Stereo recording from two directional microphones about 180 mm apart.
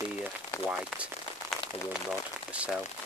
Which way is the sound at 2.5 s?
5° right (ahead or behind).